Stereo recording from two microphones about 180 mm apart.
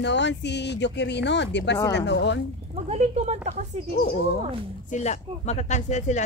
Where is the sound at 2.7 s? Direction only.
35° right (ahead or behind).